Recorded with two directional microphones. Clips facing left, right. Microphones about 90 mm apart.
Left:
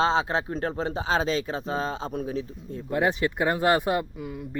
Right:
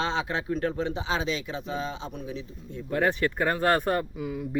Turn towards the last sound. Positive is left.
turn(degrees=0)  # may be behind; listen again after turning